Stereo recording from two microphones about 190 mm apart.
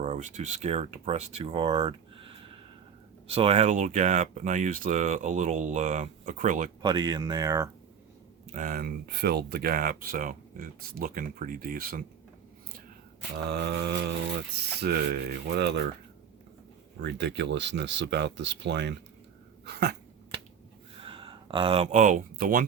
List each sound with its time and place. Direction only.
0.0 s speech: 40° right (ahead or behind)
6.8 s speech: 20° right (ahead or behind)
8.5 s speech: 45° right (ahead or behind)
13.5 s speech: 60° right (ahead or behind)
17.0 s speech: 65° right (ahead or behind)
19.6 s dog: 60° right (ahead or behind)
21.0 s speech: 25° right (ahead or behind); by 22.6 s 45° right (ahead or behind)